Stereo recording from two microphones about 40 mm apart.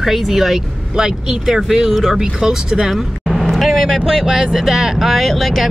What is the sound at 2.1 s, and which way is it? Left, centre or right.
Speech, centre.